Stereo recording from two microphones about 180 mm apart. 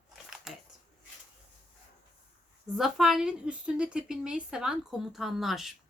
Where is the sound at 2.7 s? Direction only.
Centre (ahead or behind).